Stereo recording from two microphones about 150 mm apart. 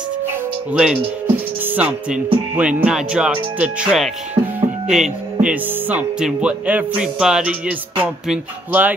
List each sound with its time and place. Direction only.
0.7 s speech: 10° right (ahead or behind)